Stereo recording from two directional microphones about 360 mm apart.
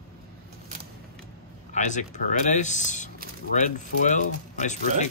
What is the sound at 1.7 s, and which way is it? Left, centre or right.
Speech, centre.